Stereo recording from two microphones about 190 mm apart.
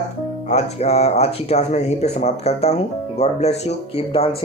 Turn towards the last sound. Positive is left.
turn(degrees=35)  # may be behind; listen again after turning